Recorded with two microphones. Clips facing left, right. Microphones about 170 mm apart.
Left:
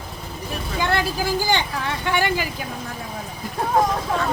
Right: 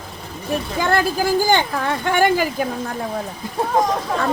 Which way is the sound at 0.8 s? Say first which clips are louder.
Right 3 dB; 45° right (ahead or behind).